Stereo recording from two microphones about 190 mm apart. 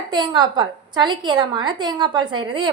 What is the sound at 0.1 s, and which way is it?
A woman's voice, 25° right (ahead or behind).